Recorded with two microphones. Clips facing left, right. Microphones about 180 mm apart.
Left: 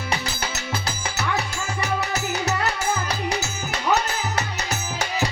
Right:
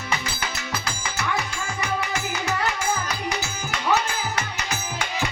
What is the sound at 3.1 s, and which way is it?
Music, 35° left (ahead or behind).